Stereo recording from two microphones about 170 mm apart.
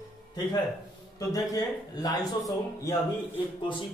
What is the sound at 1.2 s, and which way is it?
A man's voice, 20° left (ahead or behind).